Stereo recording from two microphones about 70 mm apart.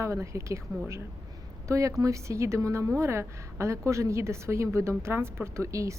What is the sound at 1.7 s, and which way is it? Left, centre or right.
A woman's voice, right.